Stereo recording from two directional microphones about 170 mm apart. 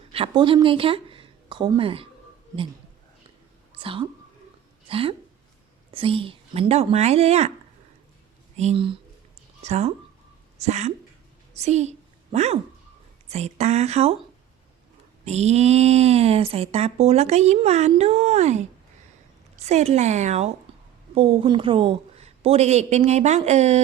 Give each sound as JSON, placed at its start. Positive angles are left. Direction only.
{"t": 0.1, "sound": "a woman's voice", "side_deg": -30}
{"t": 3.8, "sound": "speech", "side_deg": -30}
{"t": 8.5, "sound": "a woman's voice", "side_deg": -35}
{"t": 15.2, "sound": "speech", "side_deg": -40}
{"t": 20.7, "sound": "a sound", "side_deg": -30}
{"t": 21.2, "sound": "speech", "side_deg": -30}